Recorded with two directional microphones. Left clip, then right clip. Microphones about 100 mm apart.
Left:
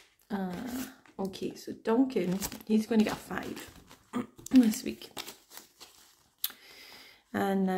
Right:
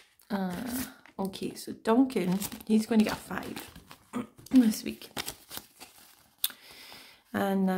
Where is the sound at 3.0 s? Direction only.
15° right (ahead or behind).